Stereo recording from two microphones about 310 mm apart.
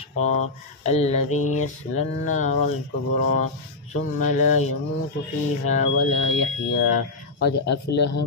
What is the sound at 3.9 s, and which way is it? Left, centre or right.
Speech, left.